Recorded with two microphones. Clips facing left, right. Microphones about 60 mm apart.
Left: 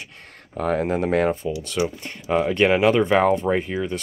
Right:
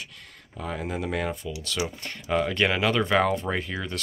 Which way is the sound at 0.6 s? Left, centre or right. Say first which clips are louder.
Left 9 dB; left.